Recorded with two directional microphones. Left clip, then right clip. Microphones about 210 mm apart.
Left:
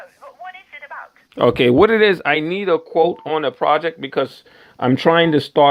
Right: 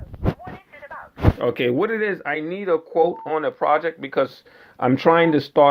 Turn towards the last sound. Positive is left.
turn(degrees=35)  # may be behind; listen again after turning